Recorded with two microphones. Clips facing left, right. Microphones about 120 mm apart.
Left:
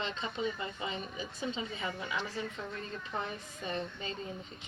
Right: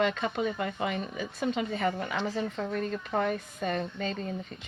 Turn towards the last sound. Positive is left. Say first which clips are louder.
# right 7 dB
turn(degrees=-80)